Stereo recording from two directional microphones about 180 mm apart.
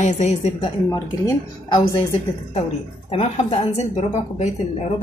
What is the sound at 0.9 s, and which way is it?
Speech, 15° left (ahead or behind).